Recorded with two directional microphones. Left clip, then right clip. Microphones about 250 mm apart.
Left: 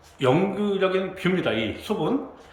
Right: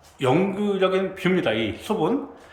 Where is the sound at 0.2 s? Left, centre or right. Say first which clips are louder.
Even; centre.